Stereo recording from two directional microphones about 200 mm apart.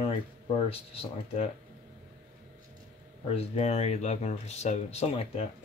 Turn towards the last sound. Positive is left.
turn(degrees=30)  # may be behind; listen again after turning